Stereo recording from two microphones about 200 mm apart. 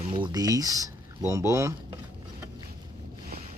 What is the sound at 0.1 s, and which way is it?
Speech, 20° right (ahead or behind).